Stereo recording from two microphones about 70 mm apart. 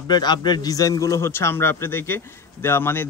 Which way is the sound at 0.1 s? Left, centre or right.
Left.